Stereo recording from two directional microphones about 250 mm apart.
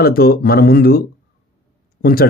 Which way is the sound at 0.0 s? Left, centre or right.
Left.